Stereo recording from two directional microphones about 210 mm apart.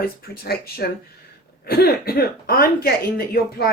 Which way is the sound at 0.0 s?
45° left (ahead or behind).